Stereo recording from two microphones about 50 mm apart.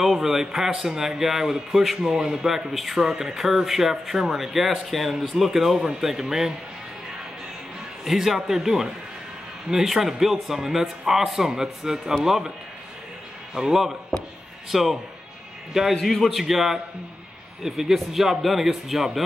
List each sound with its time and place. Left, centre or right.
0.0 s speech: centre
5.1 s speech: centre
8.0 s speech: centre
13.6 s speech: centre
15.9 s speech: centre